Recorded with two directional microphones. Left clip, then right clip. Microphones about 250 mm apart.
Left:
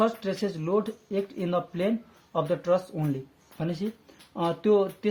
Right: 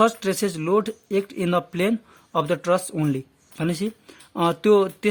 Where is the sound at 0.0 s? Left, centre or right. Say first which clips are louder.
Right 6 dB; right.